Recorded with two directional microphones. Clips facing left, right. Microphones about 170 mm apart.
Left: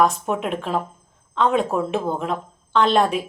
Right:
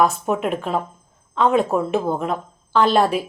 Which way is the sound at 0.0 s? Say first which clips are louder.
Right 1 dB; centre (ahead or behind).